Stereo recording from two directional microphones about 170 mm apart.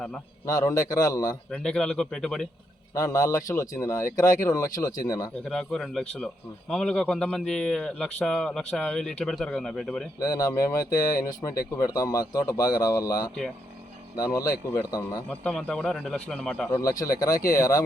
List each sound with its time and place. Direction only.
0.4 s speech: 20° left (ahead or behind)
1.5 s speech: 5° left (ahead or behind)
2.9 s speech: 20° left (ahead or behind)
5.5 s speech: 5° left (ahead or behind)
10.2 s speech: 20° left (ahead or behind)
15.3 s speech: 5° left (ahead or behind)
17.0 s speech: 20° left (ahead or behind)